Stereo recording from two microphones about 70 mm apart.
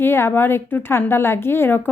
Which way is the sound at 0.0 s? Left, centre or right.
Left.